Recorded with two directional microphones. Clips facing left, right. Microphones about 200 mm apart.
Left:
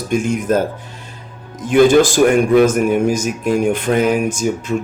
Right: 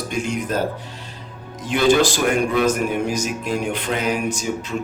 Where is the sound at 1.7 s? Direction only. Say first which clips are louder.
Left 6 dB; 50° left (ahead or behind).